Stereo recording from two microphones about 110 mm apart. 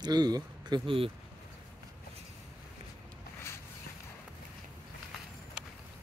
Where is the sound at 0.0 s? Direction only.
40° right (ahead or behind); by 1.1 s 55° right (ahead or behind).